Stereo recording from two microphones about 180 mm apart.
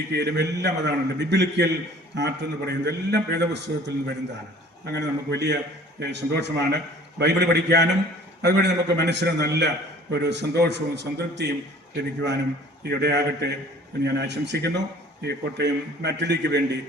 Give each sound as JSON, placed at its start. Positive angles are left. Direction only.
{"t": 0.1, "sound": "a man's voice", "side_deg": -70}